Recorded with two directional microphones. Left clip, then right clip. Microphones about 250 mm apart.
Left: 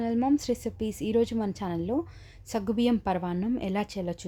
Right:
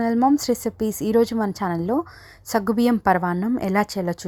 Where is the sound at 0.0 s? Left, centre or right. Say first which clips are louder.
Right 8 dB; centre.